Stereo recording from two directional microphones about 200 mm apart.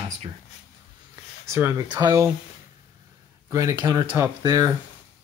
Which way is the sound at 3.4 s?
15° right (ahead or behind).